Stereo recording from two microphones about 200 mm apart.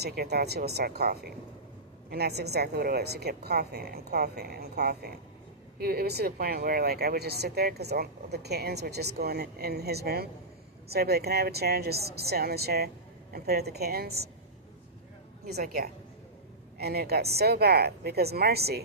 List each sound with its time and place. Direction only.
0.0 s speech: 55° right (ahead or behind)
15.4 s speech: 50° right (ahead or behind)